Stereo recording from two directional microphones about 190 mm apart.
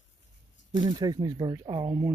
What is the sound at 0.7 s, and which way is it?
Speech, 20° right (ahead or behind).